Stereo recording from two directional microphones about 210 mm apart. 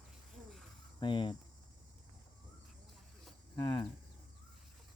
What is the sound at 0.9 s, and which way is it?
Speech, 20° left (ahead or behind).